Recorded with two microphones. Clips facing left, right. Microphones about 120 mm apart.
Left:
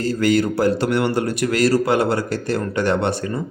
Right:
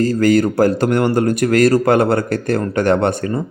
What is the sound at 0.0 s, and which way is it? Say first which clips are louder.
Speech: right 4 dB; 45° right (ahead or behind).